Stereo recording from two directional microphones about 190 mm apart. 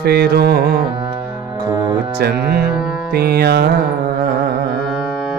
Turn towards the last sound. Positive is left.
turn(degrees=-55)  # may be behind; listen again after turning